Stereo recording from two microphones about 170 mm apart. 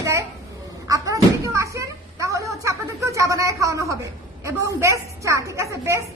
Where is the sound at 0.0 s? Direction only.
20° right (ahead or behind).